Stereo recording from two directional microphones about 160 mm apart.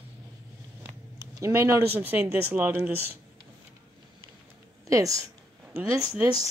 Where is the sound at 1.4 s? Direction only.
15° right (ahead or behind).